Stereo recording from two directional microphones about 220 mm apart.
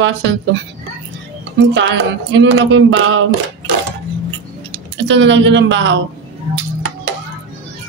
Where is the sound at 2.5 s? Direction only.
55° right (ahead or behind).